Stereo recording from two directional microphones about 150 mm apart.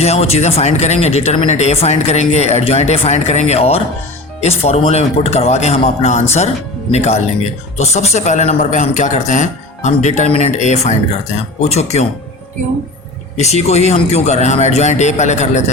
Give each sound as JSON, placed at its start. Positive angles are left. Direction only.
{"t": 0.0, "sound": "speech", "side_deg": 45}
{"t": 13.3, "sound": "speech", "side_deg": 50}